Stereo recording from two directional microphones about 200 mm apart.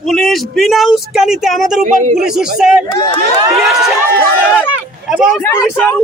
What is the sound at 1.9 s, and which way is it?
Speech, 40° right (ahead or behind).